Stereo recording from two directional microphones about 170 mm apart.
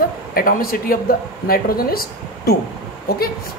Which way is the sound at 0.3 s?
60° left (ahead or behind).